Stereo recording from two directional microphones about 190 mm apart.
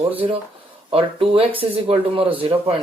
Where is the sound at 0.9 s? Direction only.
30° right (ahead or behind).